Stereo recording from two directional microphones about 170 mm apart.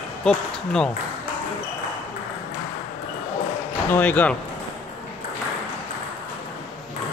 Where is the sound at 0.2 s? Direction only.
5° left (ahead or behind).